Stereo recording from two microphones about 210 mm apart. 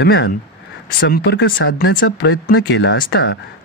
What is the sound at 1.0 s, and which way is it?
Speech, 50° left (ahead or behind).